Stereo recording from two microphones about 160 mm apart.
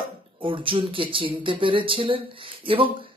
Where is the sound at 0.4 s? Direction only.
35° right (ahead or behind).